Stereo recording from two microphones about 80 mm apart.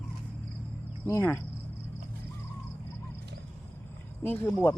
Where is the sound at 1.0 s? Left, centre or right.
Left.